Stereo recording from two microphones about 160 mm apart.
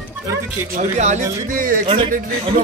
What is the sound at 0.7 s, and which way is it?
A man's voice, 50° right (ahead or behind).